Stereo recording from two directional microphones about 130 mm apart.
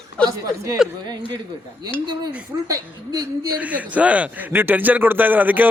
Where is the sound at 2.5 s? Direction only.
25° right (ahead or behind).